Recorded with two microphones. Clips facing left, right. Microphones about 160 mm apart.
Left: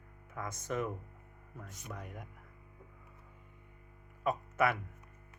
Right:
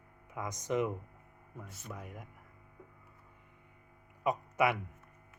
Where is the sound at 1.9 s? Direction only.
5° right (ahead or behind).